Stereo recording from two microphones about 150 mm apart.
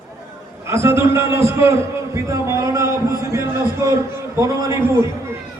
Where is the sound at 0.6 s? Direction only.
15° right (ahead or behind).